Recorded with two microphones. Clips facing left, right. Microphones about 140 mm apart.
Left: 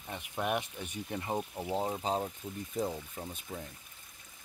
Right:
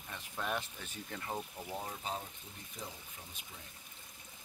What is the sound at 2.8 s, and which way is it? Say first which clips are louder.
Speech: left 14 dB; 55° left (ahead or behind).